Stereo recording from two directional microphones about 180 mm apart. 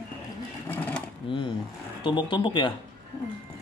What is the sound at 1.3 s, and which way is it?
Speech, 30° left (ahead or behind).